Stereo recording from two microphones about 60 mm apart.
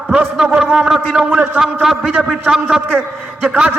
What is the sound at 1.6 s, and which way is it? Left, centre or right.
Speech, centre.